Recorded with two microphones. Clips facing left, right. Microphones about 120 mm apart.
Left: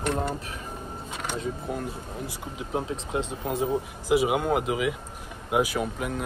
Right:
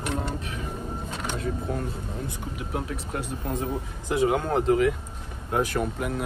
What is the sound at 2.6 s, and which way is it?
Speech, 20° left (ahead or behind).